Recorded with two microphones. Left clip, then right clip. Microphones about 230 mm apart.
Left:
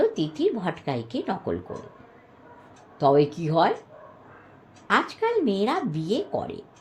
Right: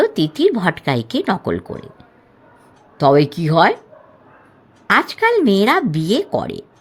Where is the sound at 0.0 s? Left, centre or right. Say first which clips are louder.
Right 8 dB; right.